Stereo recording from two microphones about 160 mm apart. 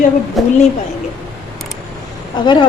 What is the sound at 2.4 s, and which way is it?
Speech, 30° left (ahead or behind).